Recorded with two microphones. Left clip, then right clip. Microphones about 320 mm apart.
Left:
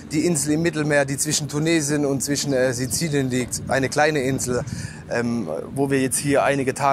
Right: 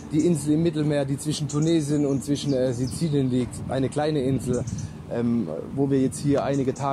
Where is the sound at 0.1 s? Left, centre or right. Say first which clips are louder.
Left 1 dB; left.